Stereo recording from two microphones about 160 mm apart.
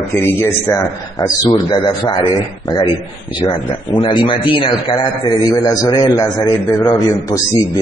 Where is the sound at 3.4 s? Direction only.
30° left (ahead or behind).